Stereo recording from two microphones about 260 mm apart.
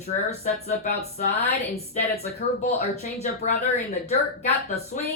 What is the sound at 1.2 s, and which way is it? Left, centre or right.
Speech, left.